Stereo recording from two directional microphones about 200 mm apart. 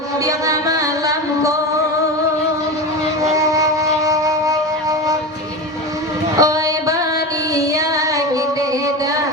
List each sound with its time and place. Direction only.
0.3 s music: 15° right (ahead or behind)
3.3 s wind instrument: 15° right (ahead or behind)
6.3 s a sound: 15° right (ahead or behind)
7.5 s music: 15° right (ahead or behind)